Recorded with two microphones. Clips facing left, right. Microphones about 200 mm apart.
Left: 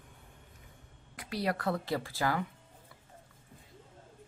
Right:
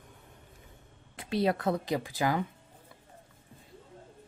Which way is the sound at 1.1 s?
25° right (ahead or behind).